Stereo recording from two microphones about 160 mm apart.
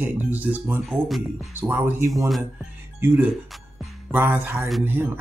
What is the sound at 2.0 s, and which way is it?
Speech, centre (ahead or behind).